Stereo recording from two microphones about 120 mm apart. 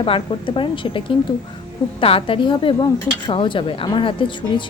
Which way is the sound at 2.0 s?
50° left (ahead or behind).